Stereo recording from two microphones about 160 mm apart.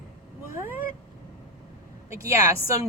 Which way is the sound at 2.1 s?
20° right (ahead or behind).